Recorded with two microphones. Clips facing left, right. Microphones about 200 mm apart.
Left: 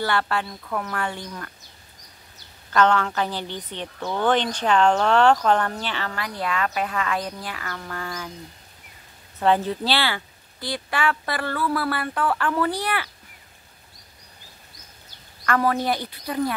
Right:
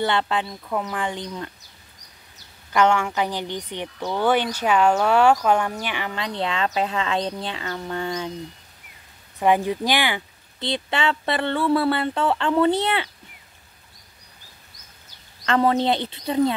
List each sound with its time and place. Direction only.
0.0 s speech: 20° right (ahead or behind)
2.7 s a woman's voice: 15° right (ahead or behind)
9.4 s speech: 15° right (ahead or behind)
15.4 s speech: 25° right (ahead or behind)